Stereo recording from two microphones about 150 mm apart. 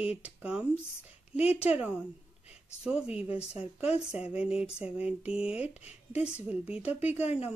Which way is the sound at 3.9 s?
10° right (ahead or behind).